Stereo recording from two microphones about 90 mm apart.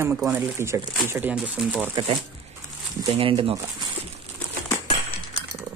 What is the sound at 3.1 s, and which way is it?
Speech, 90° right.